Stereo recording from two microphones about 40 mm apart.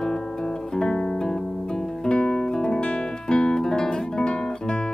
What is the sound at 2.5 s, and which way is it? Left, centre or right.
Guitar, centre.